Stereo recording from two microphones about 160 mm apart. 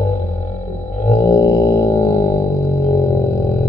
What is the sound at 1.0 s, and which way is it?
Music, 40° left (ahead or behind).